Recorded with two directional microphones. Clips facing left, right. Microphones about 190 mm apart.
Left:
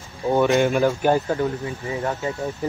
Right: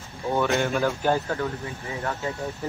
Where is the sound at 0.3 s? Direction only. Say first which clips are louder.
Left 6 dB; 20° left (ahead or behind).